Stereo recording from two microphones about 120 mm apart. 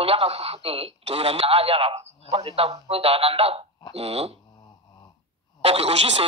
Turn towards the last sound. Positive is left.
turn(degrees=-60)  # may be behind; listen again after turning